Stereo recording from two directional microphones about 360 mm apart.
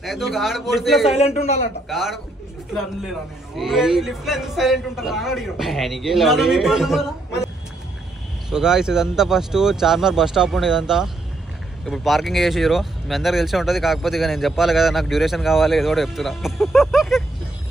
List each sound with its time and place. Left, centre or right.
0.0 s speech: centre
1.0 s speech: centre
1.9 s speech: centre